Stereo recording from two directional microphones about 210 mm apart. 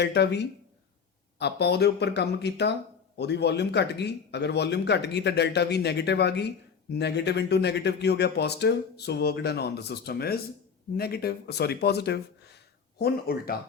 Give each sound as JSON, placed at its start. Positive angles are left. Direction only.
{"t": 0.0, "sound": "speech", "side_deg": 55}